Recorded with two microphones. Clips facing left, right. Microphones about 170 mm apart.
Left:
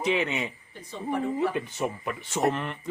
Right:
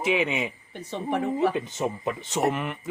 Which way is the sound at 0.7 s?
70° right (ahead or behind).